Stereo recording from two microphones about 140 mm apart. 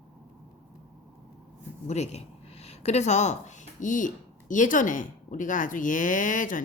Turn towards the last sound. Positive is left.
turn(degrees=70)  # may be behind; listen again after turning